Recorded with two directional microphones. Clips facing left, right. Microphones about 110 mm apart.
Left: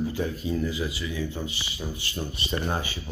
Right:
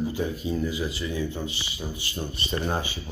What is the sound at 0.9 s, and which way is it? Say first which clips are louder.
Speech: right 2 dB; 35° right (ahead or behind).